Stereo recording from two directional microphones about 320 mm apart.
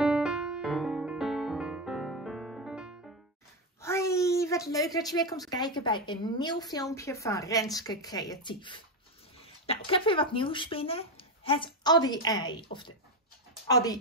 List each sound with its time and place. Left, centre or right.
0.0 s music: centre
3.8 s a woman's voice: centre
13.7 s a woman's voice: centre